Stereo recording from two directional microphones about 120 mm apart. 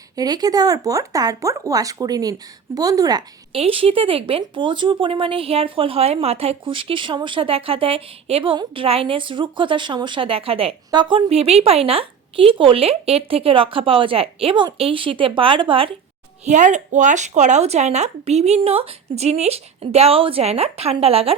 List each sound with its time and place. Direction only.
0.2 s speech: 35° right (ahead or behind)
3.5 s speech: 50° right (ahead or behind)
10.9 s speech: 40° right (ahead or behind)
11.3 s speech: 60° right (ahead or behind)
16.5 s speech: 90° right; by 21.3 s 55° right (ahead or behind)